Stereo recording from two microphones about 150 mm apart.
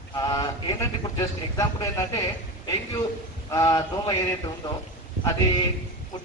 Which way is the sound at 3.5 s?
25° left (ahead or behind).